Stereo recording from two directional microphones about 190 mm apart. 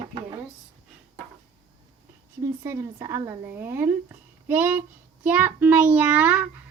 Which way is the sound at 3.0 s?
15° right (ahead or behind).